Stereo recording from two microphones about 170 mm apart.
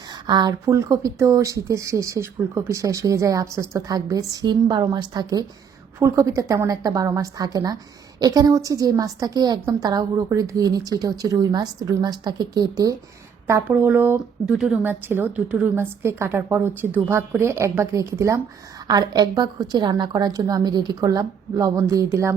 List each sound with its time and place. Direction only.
0.3 s a woman's voice: 25° right (ahead or behind)